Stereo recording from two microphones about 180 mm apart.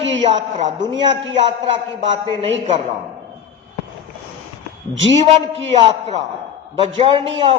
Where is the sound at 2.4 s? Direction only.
35° right (ahead or behind).